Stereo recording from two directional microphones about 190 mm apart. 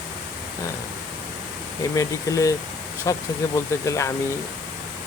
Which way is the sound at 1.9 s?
15° left (ahead or behind).